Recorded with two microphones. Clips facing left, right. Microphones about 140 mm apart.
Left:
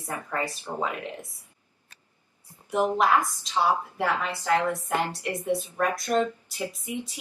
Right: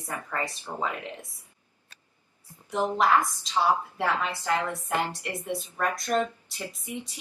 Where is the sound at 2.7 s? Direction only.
15° left (ahead or behind).